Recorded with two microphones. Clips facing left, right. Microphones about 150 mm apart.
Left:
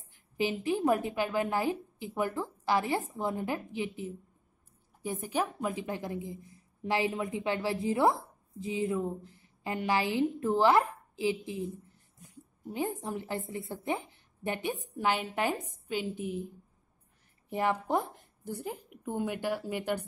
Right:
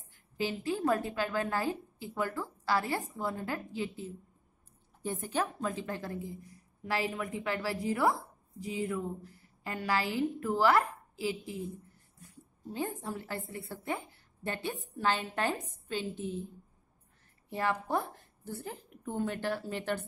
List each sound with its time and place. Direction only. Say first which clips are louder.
0.1 s a woman's voice: left 3 dB; 15° left (ahead or behind)
17.5 s a woman's voice: left 3 dB; 20° left (ahead or behind)